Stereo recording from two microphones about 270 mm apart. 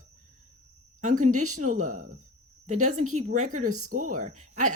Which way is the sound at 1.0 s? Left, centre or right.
Right.